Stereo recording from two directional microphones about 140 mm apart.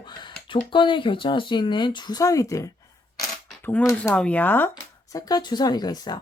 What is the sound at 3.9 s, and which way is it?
Speech, 10° left (ahead or behind).